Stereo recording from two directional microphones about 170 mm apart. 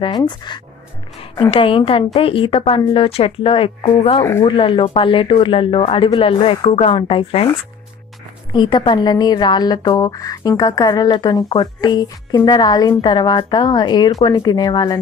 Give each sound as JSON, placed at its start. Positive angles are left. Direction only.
{"t": 0.0, "sound": "speech", "side_deg": 25}
{"t": 4.2, "sound": "speech", "side_deg": 15}
{"t": 4.5, "sound": "speech", "side_deg": 30}
{"t": 8.5, "sound": "speech", "side_deg": 25}